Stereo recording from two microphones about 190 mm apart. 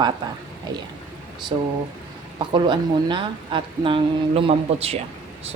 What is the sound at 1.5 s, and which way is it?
Speech, 30° right (ahead or behind).